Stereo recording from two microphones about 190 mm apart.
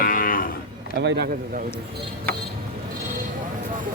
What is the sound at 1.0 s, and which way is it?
Speech, 60° right (ahead or behind).